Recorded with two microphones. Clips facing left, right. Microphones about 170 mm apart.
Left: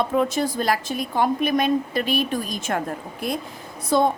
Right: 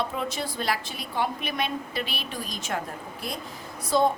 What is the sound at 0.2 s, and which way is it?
A woman's voice, 45° left (ahead or behind).